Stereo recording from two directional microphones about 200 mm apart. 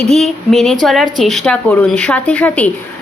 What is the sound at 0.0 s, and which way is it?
Speech, centre (ahead or behind).